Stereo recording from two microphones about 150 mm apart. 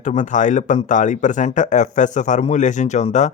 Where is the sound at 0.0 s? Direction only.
55° left (ahead or behind).